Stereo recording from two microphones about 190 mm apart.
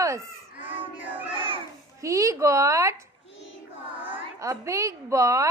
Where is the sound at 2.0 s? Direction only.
15° right (ahead or behind).